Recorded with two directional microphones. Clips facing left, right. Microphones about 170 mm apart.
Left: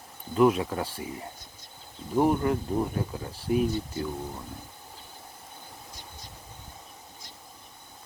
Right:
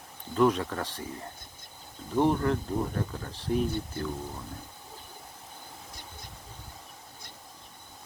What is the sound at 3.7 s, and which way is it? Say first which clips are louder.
Speech: left 2 dB; 55° right (ahead or behind).